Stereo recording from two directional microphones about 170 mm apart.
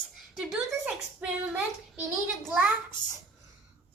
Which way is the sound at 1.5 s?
5° right (ahead or behind).